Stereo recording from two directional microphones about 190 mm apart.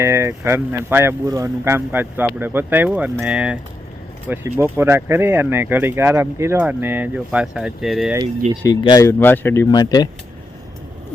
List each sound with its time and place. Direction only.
0.0 s speech: 15° right (ahead or behind)
8.6 s speech: 20° left (ahead or behind)